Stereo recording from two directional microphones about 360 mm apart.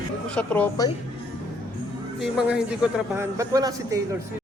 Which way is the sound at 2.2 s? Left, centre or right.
Centre.